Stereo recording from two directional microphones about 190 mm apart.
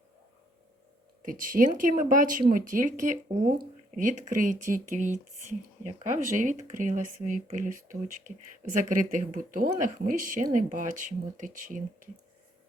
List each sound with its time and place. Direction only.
1.2 s speech: 45° right (ahead or behind)